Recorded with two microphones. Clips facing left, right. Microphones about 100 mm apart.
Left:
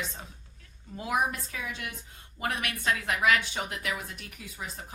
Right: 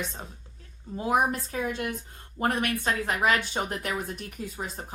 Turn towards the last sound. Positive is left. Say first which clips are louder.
# right 6 dB
turn(degrees=-40)  # may be behind; listen again after turning